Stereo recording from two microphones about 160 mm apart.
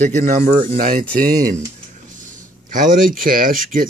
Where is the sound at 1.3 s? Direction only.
20° right (ahead or behind).